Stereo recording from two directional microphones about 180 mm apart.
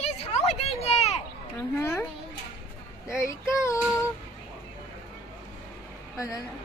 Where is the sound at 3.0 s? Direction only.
15° left (ahead or behind).